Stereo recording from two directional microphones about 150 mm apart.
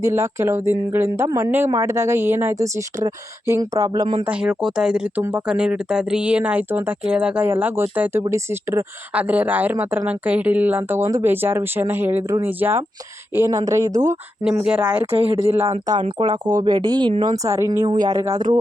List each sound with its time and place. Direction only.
0.0 s speech: 20° right (ahead or behind)
4.3 s speech: 5° right (ahead or behind); by 14.2 s 20° right (ahead or behind)
14.4 s speech: 5° right (ahead or behind)
15.0 s speech: 40° right (ahead or behind)
17.4 s speech: 20° right (ahead or behind)